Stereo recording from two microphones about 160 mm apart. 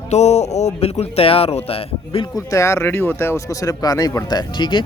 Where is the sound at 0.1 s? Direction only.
45° left (ahead or behind).